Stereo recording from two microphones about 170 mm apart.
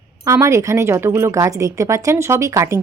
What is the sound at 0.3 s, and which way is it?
Speech, 15° right (ahead or behind).